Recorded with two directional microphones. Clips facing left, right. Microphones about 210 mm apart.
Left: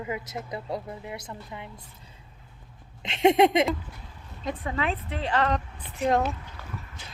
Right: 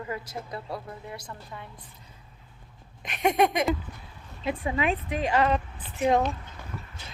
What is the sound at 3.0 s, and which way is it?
Speech, 25° left (ahead or behind).